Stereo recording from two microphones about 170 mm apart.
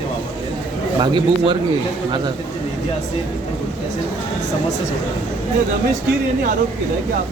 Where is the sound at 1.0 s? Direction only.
25° right (ahead or behind).